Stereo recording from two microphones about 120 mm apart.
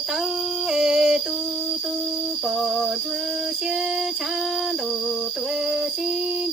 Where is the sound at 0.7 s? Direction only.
5° right (ahead or behind).